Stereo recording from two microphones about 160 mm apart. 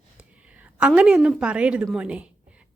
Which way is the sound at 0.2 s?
10° right (ahead or behind).